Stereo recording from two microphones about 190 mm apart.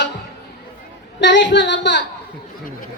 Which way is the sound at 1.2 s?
70° left (ahead or behind).